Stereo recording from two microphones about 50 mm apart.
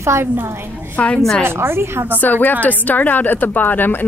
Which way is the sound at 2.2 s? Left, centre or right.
Left.